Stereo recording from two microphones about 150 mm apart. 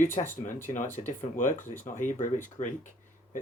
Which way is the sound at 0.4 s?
60° left (ahead or behind).